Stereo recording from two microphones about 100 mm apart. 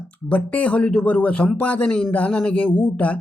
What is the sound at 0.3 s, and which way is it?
Speech, 15° left (ahead or behind).